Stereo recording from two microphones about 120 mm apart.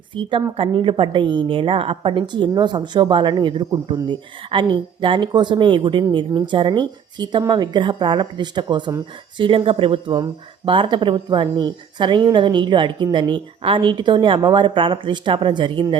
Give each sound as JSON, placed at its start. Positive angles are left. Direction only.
{"t": 0.2, "sound": "a woman's voice", "side_deg": -45}